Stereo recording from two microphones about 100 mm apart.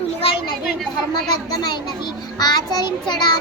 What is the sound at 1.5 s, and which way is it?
A child's voice, 45° left (ahead or behind).